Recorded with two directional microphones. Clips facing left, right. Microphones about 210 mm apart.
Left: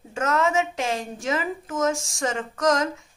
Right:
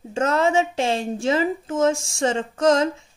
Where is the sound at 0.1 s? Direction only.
30° right (ahead or behind).